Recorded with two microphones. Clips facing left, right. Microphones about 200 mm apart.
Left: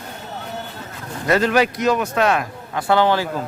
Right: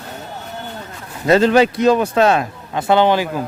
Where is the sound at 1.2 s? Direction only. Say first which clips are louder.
Right 5 dB; 25° right (ahead or behind).